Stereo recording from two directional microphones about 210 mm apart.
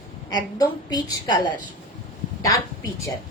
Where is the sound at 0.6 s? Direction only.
20° left (ahead or behind).